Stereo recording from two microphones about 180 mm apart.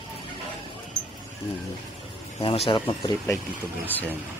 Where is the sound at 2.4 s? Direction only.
30° left (ahead or behind).